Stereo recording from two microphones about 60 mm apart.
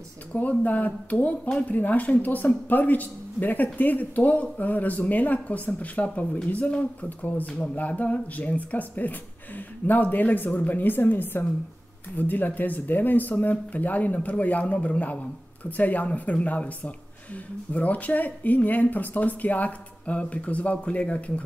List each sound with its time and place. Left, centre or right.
0.3 s a woman's voice: left